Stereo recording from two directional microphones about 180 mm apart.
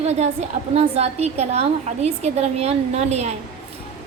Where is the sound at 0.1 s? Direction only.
35° right (ahead or behind).